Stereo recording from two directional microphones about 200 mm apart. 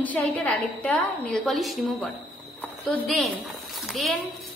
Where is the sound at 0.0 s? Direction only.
10° left (ahead or behind).